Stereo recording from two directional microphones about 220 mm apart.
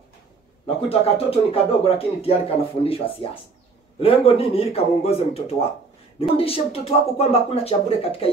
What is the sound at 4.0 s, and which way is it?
Speech, 25° left (ahead or behind).